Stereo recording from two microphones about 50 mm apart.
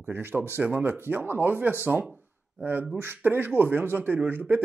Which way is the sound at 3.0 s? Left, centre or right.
Right.